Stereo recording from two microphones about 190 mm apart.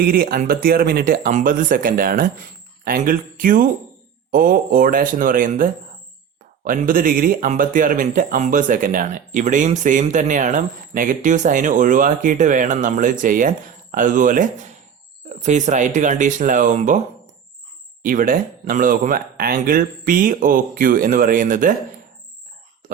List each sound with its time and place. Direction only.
0.1 s speech: 50° right (ahead or behind)
18.0 s speech: 45° right (ahead or behind)